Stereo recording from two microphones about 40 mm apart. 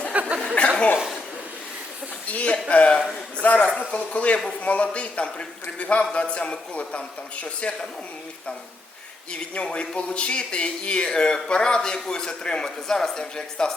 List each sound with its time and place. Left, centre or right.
0.1 s a sound: right
0.6 s chuckle: left
2.2 s speech: left
3.4 s a man's voice: left
9.7 s speech: left